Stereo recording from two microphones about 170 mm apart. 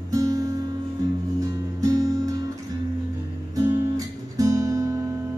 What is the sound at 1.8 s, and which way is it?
Music, 20° right (ahead or behind).